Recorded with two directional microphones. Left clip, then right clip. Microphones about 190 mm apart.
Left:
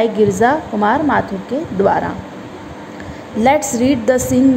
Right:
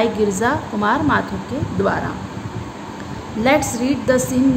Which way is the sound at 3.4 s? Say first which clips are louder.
Left 4 dB; 30° left (ahead or behind).